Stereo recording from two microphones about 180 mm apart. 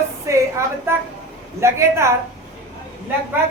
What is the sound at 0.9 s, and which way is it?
A woman's voice, 10° right (ahead or behind).